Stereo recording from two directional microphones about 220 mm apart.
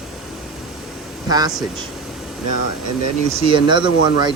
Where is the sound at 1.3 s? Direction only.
15° right (ahead or behind).